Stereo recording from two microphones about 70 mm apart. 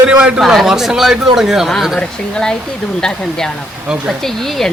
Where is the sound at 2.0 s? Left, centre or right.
Centre.